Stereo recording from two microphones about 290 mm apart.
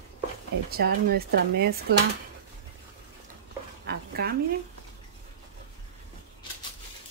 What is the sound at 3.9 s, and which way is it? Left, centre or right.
Dog, right.